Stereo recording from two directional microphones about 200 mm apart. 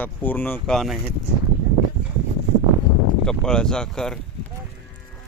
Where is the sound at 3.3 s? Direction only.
5° left (ahead or behind).